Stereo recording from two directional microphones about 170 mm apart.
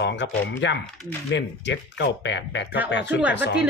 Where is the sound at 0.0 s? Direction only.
90° left.